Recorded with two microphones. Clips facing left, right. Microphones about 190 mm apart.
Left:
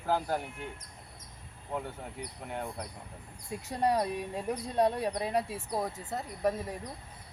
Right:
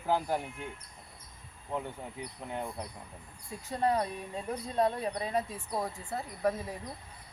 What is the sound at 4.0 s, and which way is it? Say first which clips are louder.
Speech: left 2 dB; 10° left (ahead or behind).